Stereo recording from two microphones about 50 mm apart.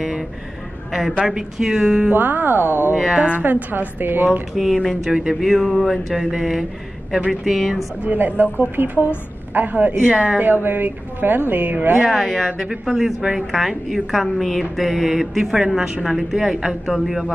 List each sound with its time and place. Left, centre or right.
1.2 s speech: centre
2.1 s a woman's voice: right
3.1 s speech: right
3.4 s a woman's voice: right
4.8 s a woman's voice: centre
8.0 s a woman's voice: right
10.0 s speech: right
10.4 s a woman's voice: right
12.1 s a woman's voice: centre